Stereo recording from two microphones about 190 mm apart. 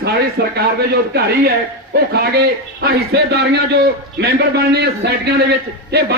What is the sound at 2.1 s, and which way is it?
A man's voice, 55° right (ahead or behind).